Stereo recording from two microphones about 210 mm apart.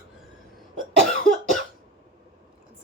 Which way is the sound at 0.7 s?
35° left (ahead or behind).